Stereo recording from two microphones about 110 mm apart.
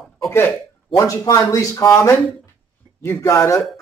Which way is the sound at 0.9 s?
30° left (ahead or behind).